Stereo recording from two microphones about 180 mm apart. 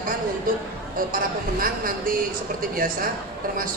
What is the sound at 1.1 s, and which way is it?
Speech, 50° right (ahead or behind).